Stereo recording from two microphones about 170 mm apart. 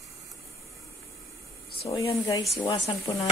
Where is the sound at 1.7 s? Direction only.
35° left (ahead or behind).